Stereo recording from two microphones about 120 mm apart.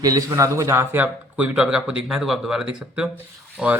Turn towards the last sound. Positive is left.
turn(degrees=-10)  # may be behind; listen again after turning